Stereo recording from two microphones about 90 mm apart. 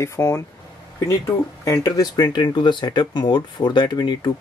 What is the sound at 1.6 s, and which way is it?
Speech, 40° left (ahead or behind).